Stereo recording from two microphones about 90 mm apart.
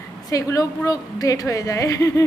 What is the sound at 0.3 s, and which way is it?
A woman's voice, 40° left (ahead or behind).